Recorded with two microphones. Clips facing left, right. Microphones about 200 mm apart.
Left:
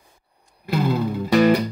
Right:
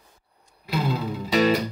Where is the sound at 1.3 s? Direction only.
50° left (ahead or behind).